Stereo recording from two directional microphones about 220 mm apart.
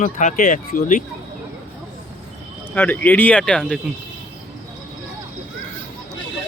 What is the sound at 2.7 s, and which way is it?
Speech, 5° left (ahead or behind).